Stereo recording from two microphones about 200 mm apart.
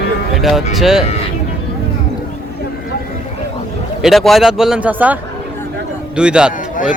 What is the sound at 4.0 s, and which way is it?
A man's voice, centre (ahead or behind).